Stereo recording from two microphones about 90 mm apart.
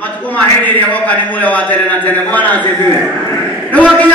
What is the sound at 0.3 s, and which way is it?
A man's voice, 20° left (ahead or behind).